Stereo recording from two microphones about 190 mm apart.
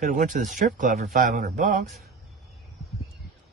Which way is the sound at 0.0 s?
40° right (ahead or behind).